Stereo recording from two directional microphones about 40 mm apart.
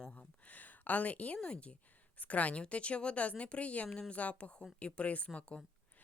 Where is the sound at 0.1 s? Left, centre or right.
Left.